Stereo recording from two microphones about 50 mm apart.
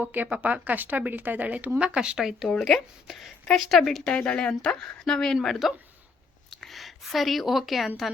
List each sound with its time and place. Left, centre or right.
0.0 s speech: right
1.8 s speech: right
2.5 s speech: centre
3.1 s a woman's voice: centre
4.0 s speech: left; by 7.9 s centre